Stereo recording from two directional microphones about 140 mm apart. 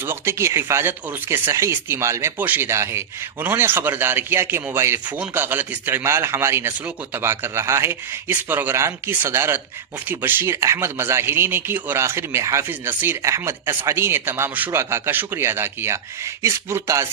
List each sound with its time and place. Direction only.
0.0 s speech: 15° right (ahead or behind)